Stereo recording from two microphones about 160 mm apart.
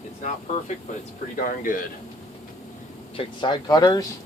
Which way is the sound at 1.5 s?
55° left (ahead or behind).